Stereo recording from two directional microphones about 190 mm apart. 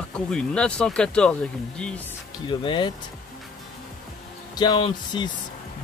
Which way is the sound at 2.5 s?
25° left (ahead or behind).